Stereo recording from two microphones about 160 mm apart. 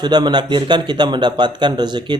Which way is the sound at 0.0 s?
25° right (ahead or behind).